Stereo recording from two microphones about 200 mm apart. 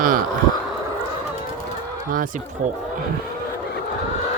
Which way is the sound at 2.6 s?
40° right (ahead or behind).